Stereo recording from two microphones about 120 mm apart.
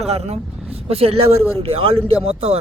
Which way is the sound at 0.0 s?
60° right (ahead or behind).